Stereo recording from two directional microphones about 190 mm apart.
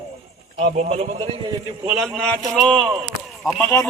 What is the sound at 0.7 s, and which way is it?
Speech, 35° right (ahead or behind).